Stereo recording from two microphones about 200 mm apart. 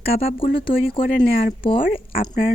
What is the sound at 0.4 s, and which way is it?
Speech, 45° left (ahead or behind).